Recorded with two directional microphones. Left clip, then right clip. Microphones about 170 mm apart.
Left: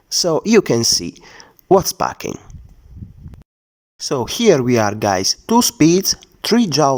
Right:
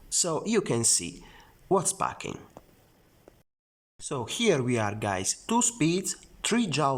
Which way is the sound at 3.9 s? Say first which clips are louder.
Left 11 dB; 35° left (ahead or behind).